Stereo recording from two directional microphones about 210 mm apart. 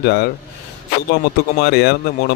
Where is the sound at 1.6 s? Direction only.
50° left (ahead or behind).